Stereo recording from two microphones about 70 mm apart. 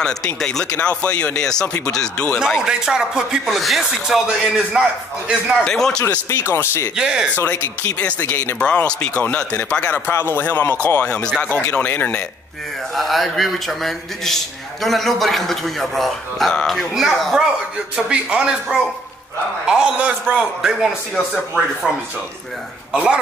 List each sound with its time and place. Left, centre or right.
0.0 s speech: centre
2.6 s a man's voice: centre
5.6 s speech: centre
6.2 s speech: left
7.0 s a man's voice: centre
7.3 s a man's voice: left
8.5 s a man's voice: centre; by 11.1 s left
11.1 s a man's voice: centre
12.9 s a man's voice: centre
17.9 s a man's voice: centre